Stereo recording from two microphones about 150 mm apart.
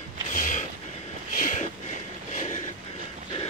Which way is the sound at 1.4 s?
60° left (ahead or behind).